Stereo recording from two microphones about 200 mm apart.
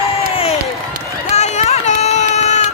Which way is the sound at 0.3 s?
30° left (ahead or behind).